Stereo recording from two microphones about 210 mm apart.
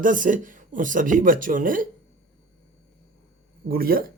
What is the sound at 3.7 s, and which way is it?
Speech, 45° right (ahead or behind).